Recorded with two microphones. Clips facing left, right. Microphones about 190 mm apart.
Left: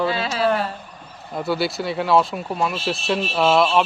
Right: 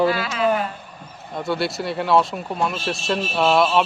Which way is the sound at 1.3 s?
Centre (ahead or behind).